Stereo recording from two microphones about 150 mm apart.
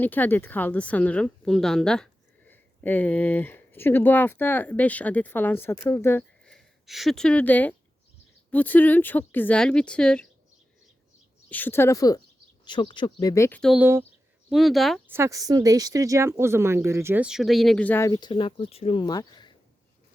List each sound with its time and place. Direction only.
0.0 s speech: 10° left (ahead or behind)
6.4 s speech: centre (ahead or behind)
11.4 s speech: 10° left (ahead or behind); by 13.3 s 30° left (ahead or behind)
13.3 s speech: 20° left (ahead or behind)
13.7 s speech: 15° right (ahead or behind)
14.5 s speech: centre (ahead or behind)
15.0 s speech: 15° right (ahead or behind)
17.2 s speech: centre (ahead or behind)
17.8 s speech: 15° left (ahead or behind)
18.1 s speech: 30° left (ahead or behind)